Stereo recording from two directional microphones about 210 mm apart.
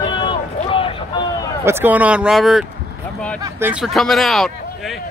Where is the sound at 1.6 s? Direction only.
10° right (ahead or behind).